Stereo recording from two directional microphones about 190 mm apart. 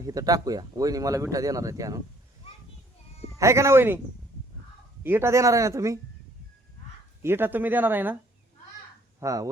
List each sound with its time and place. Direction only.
0.0 s speech: 20° right (ahead or behind)
3.3 s speech: 15° right (ahead or behind)
5.0 s speech: 15° right (ahead or behind)
7.2 s speech: 10° right (ahead or behind)
9.2 s speech: 20° right (ahead or behind)